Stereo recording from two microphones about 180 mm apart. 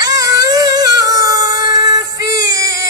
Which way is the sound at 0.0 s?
20° right (ahead or behind).